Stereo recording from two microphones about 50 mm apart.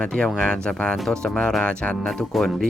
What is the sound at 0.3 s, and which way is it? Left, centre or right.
Speech, centre.